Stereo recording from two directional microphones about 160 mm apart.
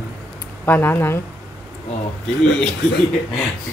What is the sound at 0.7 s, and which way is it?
Speech, 15° left (ahead or behind).